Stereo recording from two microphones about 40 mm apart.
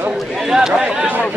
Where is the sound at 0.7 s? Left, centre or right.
Right.